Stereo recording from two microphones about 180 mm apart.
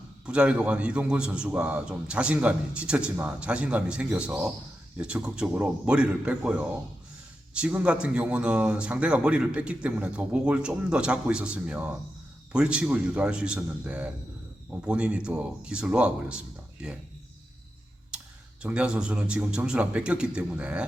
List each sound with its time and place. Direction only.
0.3 s a man's voice: 5° right (ahead or behind)
18.6 s a man's voice: 5° right (ahead or behind)